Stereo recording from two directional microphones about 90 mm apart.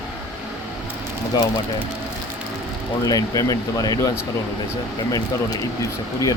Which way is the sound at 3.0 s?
40° left (ahead or behind).